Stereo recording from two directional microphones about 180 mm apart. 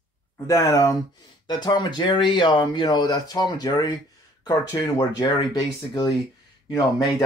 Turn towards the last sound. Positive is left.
turn(degrees=20)  # may be behind; listen again after turning